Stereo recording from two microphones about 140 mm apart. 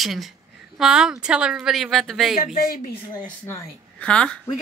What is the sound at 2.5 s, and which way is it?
Speech, 90° left.